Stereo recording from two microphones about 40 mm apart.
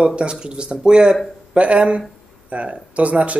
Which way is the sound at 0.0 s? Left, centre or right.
Right.